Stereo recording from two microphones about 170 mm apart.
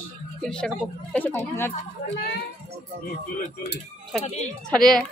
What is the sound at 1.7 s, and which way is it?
Speech, 40° left (ahead or behind).